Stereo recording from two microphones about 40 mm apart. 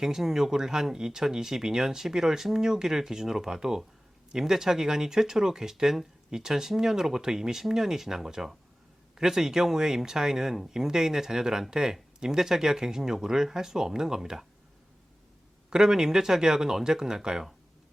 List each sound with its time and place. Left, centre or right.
0.0 s speech: centre
15.7 s speech: centre